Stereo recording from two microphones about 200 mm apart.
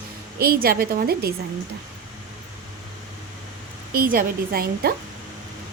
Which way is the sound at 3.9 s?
45° right (ahead or behind).